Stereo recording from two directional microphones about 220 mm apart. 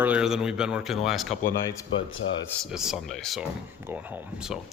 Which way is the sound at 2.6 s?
Centre (ahead or behind).